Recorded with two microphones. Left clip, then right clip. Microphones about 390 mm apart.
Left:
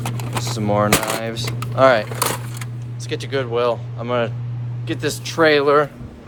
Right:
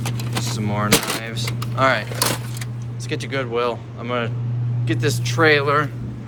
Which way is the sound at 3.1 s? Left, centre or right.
Centre.